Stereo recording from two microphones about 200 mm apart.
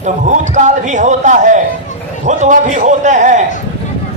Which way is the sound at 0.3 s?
35° right (ahead or behind).